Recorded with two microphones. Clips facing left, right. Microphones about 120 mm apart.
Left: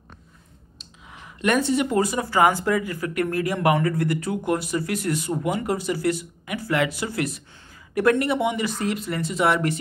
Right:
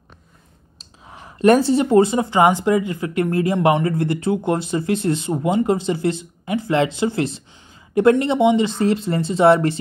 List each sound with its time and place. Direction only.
0.7 s speech: 35° right (ahead or behind)